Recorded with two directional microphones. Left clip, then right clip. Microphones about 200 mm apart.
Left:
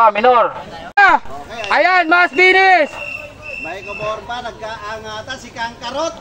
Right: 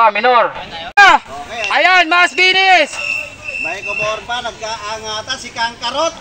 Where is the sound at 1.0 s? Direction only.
Centre (ahead or behind).